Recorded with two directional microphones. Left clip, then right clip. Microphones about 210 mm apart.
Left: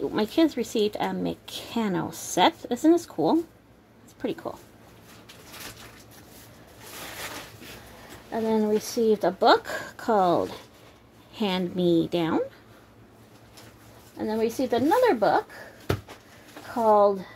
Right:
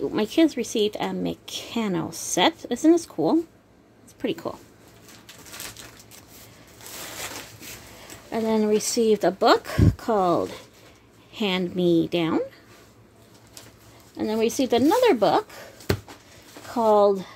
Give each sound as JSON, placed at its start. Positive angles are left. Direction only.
{"t": 0.0, "sound": "a woman's voice", "side_deg": -10}
{"t": 4.2, "sound": "speech", "side_deg": -20}
{"t": 8.3, "sound": "a woman's voice", "side_deg": -25}
{"t": 14.1, "sound": "speech", "side_deg": -25}
{"t": 16.7, "sound": "speech", "side_deg": -20}